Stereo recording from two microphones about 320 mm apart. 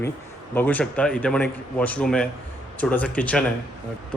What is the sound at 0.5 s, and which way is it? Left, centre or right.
A man's voice, centre.